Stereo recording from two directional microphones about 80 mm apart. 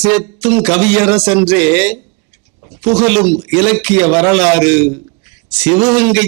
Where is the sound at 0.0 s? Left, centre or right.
Centre.